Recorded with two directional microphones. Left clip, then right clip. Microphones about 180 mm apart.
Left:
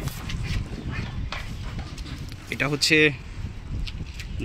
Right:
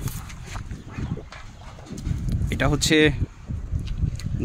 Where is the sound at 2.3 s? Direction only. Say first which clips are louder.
Right 2 dB; 70° right (ahead or behind).